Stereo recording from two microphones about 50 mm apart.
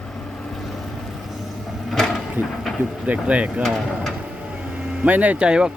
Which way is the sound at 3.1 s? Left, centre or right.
Right.